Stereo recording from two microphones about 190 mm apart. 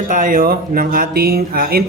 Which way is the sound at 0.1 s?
45° right (ahead or behind).